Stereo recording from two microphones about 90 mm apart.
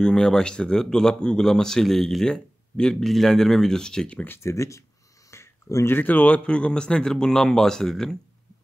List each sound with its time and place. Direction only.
0.0 s speech: 10° left (ahead or behind)
4.4 s speech: 35° left (ahead or behind)
5.3 s a sound: 35° left (ahead or behind)
5.9 s speech: 20° left (ahead or behind)